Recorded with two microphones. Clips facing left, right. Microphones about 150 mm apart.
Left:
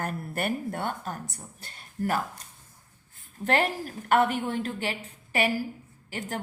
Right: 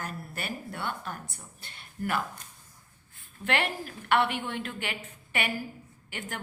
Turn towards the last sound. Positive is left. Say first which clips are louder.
# left 5 dB
turn(degrees=35)  # may be behind; listen again after turning